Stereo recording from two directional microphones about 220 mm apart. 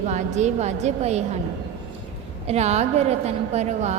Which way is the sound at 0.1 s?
30° right (ahead or behind).